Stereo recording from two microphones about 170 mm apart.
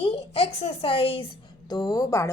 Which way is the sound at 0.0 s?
35° left (ahead or behind).